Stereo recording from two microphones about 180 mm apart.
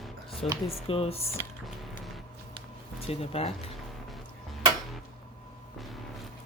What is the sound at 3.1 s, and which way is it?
Speech, 35° left (ahead or behind).